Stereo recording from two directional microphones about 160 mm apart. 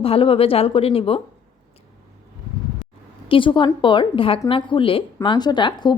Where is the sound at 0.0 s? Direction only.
35° left (ahead or behind).